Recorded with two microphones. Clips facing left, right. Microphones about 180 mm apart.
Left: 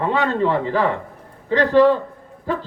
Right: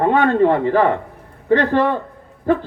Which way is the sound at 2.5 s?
55° right (ahead or behind).